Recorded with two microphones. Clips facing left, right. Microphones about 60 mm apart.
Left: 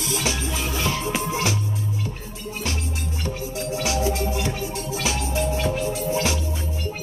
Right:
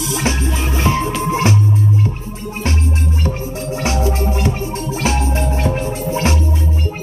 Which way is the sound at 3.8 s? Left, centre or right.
Right.